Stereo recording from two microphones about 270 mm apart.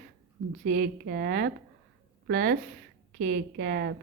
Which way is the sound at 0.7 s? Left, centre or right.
Right.